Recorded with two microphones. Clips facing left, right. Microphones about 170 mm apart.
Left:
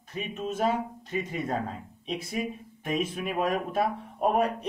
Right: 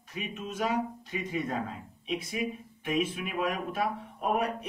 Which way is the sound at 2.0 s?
35° left (ahead or behind).